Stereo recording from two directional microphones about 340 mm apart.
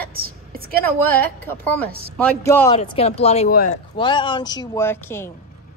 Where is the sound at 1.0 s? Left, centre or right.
Centre.